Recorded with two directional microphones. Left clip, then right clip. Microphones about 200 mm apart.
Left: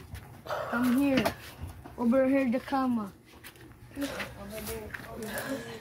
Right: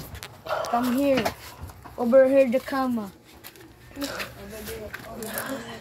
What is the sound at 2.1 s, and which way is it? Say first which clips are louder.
Speech: right 9 dB; 25° left (ahead or behind).